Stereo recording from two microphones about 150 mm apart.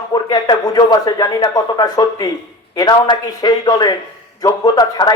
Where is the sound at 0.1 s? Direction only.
25° left (ahead or behind).